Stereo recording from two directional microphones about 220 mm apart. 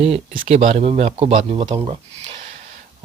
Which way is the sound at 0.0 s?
25° right (ahead or behind).